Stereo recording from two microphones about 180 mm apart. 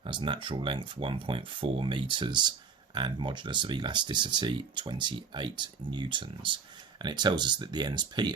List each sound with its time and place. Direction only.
0.0 s speech: 25° right (ahead or behind)